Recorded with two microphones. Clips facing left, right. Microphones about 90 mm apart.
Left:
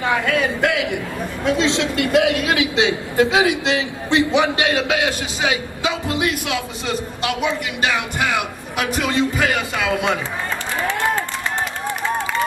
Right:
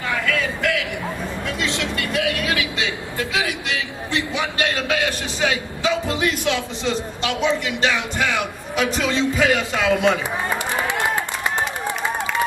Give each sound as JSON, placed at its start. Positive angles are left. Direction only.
{"t": 0.0, "sound": "a man's voice", "side_deg": 25}
{"t": 9.0, "sound": "speech", "side_deg": 60}
{"t": 9.4, "sound": "a man's voice", "side_deg": 5}